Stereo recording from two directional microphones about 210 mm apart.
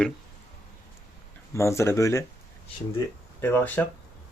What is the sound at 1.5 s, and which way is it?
Speech, 15° left (ahead or behind).